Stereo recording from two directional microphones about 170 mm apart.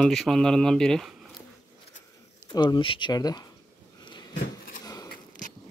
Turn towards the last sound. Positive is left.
turn(degrees=25)  # may be behind; listen again after turning